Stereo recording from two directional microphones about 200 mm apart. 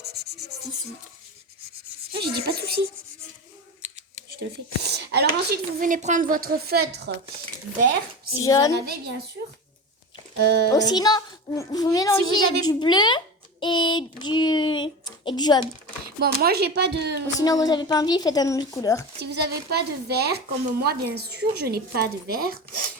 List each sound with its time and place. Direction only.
2.1 s a sound: 55° right (ahead or behind)
4.4 s a woman's voice: 55° right (ahead or behind)
8.4 s a woman's voice: 15° left (ahead or behind)
10.3 s speech: 55° right (ahead or behind)
10.7 s a child's voice: 20° left (ahead or behind)
16.2 s speech: 50° right (ahead or behind)
17.4 s a child's voice: 20° left (ahead or behind)
19.2 s a woman's voice: 55° right (ahead or behind)